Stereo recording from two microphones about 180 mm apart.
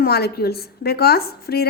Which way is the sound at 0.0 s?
60° left (ahead or behind).